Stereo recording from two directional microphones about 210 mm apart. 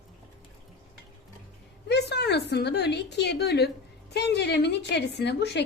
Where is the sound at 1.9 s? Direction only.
50° left (ahead or behind).